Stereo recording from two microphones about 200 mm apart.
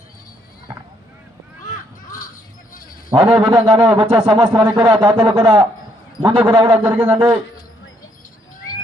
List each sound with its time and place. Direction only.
2.0 s crow: 45° left (ahead or behind)
3.1 s a man's voice: 20° right (ahead or behind)
6.8 s a man's voice: 5° right (ahead or behind)
7.1 s a man's voice: 20° right (ahead or behind)